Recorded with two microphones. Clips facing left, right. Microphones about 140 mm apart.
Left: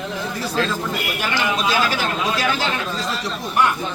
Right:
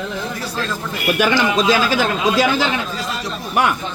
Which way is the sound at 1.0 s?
90° right.